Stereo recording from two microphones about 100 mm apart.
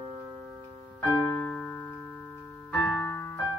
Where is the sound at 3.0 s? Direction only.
20° left (ahead or behind).